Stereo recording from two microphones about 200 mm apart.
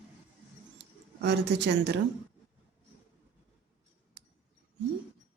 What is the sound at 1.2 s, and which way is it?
Speech, 60° right (ahead or behind).